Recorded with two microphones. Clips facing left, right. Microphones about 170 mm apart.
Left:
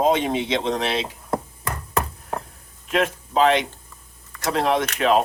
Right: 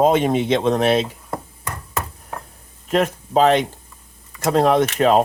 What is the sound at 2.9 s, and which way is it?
Speech, 45° right (ahead or behind).